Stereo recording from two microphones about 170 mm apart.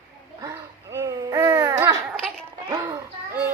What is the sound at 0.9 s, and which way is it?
Baby cry, 20° right (ahead or behind).